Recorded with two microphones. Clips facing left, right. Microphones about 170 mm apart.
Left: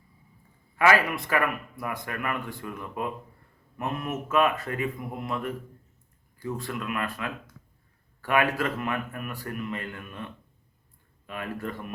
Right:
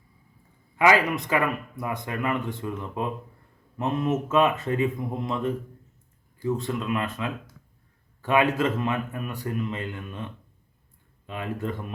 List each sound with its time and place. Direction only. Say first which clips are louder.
0.8 s speech: right 2 dB; 20° right (ahead or behind)
11.3 s speech: right 3 dB; 20° right (ahead or behind)